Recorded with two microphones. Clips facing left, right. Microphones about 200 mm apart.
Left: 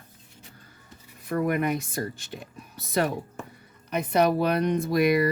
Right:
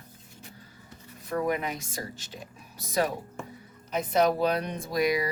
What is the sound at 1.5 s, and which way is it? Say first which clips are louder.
Speech: left 4 dB; 55° left (ahead or behind).